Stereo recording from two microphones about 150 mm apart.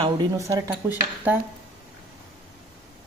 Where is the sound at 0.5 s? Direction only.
25° right (ahead or behind).